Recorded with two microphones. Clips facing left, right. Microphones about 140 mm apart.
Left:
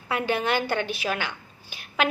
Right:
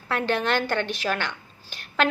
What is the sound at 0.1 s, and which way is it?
A woman's voice, 10° left (ahead or behind).